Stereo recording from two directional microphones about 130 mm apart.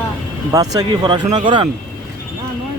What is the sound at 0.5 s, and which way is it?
Speech, 30° right (ahead or behind).